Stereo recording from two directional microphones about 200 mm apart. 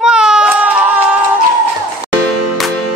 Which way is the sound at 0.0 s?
5° right (ahead or behind).